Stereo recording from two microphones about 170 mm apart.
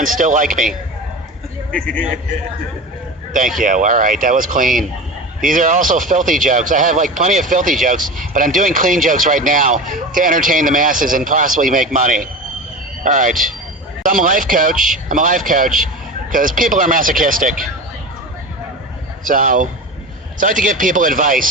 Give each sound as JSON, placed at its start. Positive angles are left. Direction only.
{"t": 0.0, "sound": "a man's voice", "side_deg": -50}
{"t": 3.6, "sound": "a man's voice", "side_deg": -50}
{"t": 19.2, "sound": "a man's voice", "side_deg": -50}